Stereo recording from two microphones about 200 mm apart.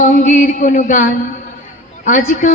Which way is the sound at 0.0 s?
40° left (ahead or behind).